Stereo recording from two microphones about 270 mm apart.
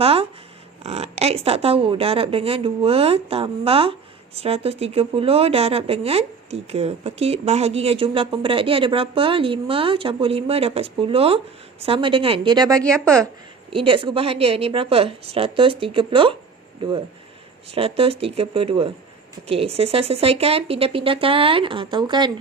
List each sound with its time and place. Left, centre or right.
0.0 s speech: right
12.8 s a woman's voice: centre
13.7 s speech: centre
17.7 s speech: right